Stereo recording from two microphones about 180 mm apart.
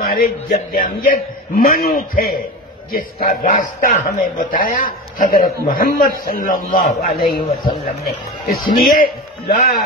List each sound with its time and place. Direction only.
0.0 s a man's voice: 55° left (ahead or behind)
7.4 s speech: 35° left (ahead or behind)
8.0 s a man's voice: 55° left (ahead or behind)